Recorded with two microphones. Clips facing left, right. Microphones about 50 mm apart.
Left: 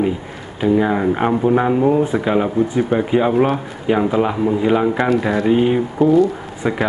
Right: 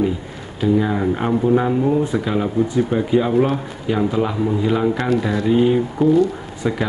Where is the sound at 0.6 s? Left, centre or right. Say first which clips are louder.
Left 2 dB; left.